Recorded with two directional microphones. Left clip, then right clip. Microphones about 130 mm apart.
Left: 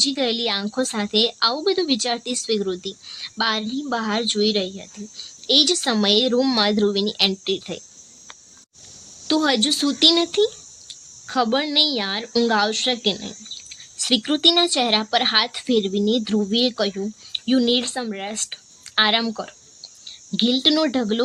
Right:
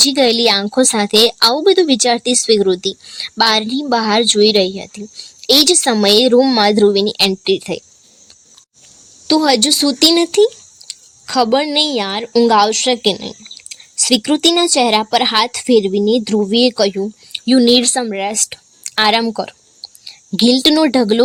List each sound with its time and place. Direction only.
0.0 s a woman's voice: 60° right (ahead or behind)
9.2 s speech: 40° right (ahead or behind)
17.7 s speech: 70° right (ahead or behind)
18.0 s speech: 45° right (ahead or behind)
19.2 s a sound: 45° right (ahead or behind)
20.7 s speech: 45° right (ahead or behind)